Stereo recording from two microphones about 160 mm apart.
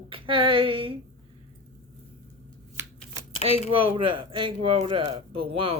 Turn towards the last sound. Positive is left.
turn(degrees=-35)  # may be behind; listen again after turning